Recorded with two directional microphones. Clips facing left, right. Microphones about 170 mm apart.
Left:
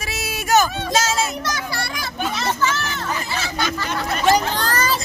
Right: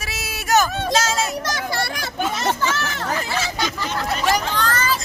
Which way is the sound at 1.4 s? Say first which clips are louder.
Right 2 dB; 50° right (ahead or behind).